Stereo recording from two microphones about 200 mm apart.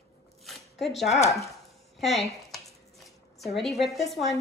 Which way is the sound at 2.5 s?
Centre (ahead or behind).